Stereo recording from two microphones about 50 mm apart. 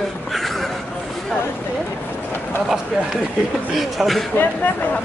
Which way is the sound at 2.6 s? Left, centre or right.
Centre.